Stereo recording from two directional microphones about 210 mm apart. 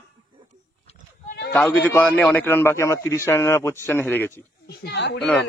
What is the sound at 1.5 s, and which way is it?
A man's voice, 5° left (ahead or behind).